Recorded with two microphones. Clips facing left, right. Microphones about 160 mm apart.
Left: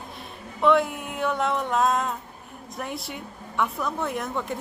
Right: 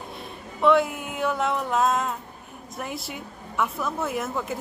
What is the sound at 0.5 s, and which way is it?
A woman's voice, centre (ahead or behind).